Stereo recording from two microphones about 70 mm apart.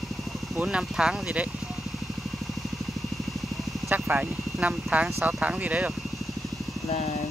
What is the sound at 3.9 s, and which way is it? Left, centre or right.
Speech, right.